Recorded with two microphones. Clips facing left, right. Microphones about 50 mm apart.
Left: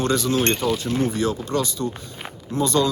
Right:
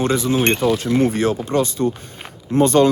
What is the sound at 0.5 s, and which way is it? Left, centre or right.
Speech, right.